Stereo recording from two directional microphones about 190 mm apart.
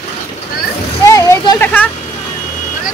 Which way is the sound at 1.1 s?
15° left (ahead or behind).